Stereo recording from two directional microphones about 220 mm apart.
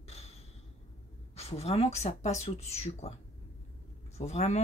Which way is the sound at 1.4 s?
30° left (ahead or behind).